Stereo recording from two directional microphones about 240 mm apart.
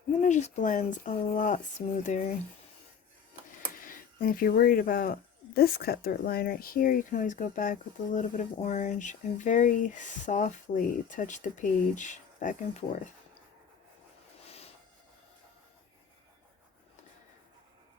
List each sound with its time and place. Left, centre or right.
0.2 s speech: left
3.8 s speech: left